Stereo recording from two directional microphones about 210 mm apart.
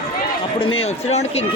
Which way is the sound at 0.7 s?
30° left (ahead or behind).